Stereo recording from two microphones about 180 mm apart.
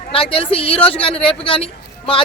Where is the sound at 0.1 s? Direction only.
30° left (ahead or behind).